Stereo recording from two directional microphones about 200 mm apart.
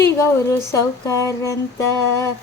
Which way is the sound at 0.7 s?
15° left (ahead or behind).